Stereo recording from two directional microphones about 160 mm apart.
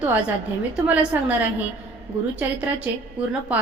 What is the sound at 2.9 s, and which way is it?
Speech, 10° right (ahead or behind).